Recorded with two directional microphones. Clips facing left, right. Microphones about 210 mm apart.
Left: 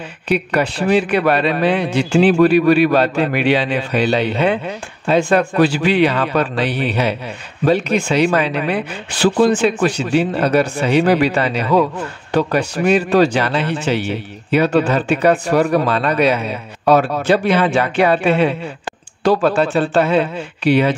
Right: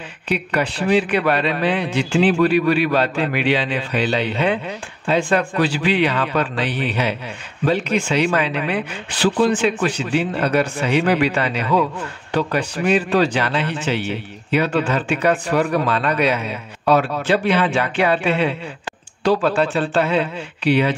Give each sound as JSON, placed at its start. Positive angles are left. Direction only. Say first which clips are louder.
{"t": 0.3, "sound": "a man's voice", "louder": "left 4 dB", "side_deg": 45}